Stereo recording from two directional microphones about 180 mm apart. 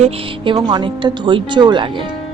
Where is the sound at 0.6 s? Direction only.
25° right (ahead or behind).